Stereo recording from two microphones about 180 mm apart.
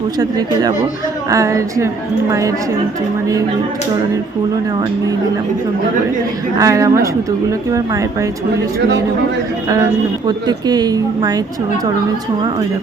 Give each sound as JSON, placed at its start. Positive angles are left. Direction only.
{"t": 0.2, "sound": "speech", "side_deg": -20}
{"t": 6.6, "sound": "speech", "side_deg": -20}
{"t": 10.2, "sound": "speech", "side_deg": -20}